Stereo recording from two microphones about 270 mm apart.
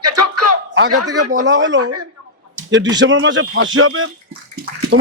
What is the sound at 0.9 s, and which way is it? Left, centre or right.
Speech, right.